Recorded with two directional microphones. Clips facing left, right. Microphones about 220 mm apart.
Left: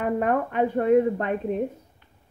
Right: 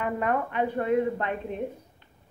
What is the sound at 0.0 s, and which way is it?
Speech, 45° left (ahead or behind).